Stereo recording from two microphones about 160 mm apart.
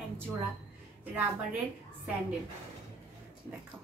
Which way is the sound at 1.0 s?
10° right (ahead or behind).